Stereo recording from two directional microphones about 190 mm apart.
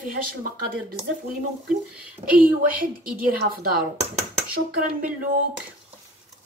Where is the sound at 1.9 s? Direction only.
10° right (ahead or behind).